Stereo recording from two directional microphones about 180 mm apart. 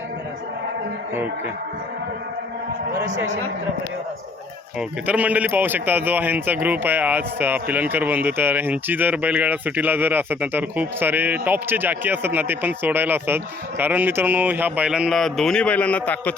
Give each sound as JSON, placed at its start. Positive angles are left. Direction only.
{"t": 4.8, "sound": "a man's voice", "side_deg": -10}